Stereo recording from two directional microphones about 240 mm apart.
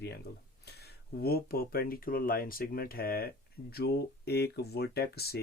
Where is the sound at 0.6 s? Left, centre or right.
Left.